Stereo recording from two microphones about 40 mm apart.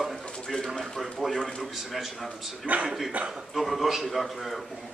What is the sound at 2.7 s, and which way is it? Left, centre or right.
Speech, right.